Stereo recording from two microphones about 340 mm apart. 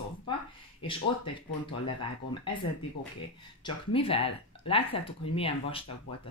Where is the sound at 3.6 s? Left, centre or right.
Centre.